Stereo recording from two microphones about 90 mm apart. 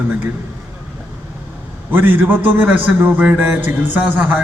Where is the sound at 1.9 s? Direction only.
20° right (ahead or behind).